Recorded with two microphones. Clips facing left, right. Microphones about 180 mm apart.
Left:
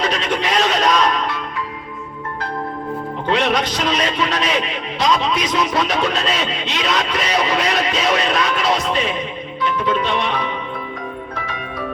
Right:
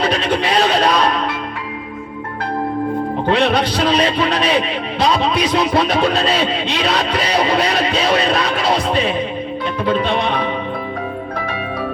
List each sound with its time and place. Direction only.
0.0 s music: 30° right (ahead or behind)
3.2 s a man's voice: 30° right (ahead or behind)